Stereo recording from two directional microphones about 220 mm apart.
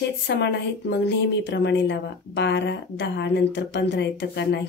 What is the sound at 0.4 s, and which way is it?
Speech, 55° left (ahead or behind).